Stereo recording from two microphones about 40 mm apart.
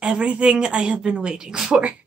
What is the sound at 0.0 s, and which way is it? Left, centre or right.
A woman's voice, right.